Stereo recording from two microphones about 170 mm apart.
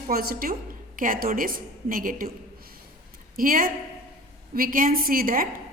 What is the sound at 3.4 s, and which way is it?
A woman's voice, 55° right (ahead or behind).